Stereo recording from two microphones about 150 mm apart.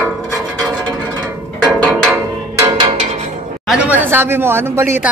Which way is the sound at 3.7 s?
10° right (ahead or behind).